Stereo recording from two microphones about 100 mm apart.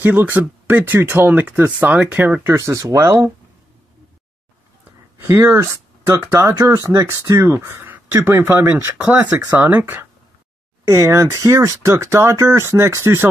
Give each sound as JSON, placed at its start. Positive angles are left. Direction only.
{"t": 0.0, "sound": "speech", "side_deg": -20}
{"t": 2.5, "sound": "speech", "side_deg": -30}
{"t": 5.2, "sound": "speech", "side_deg": -25}
{"t": 10.9, "sound": "speech", "side_deg": -30}